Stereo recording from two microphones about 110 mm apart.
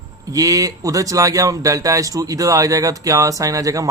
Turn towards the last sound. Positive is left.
turn(degrees=-30)  # may be behind; listen again after turning